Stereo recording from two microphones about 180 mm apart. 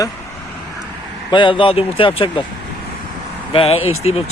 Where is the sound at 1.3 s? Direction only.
25° left (ahead or behind).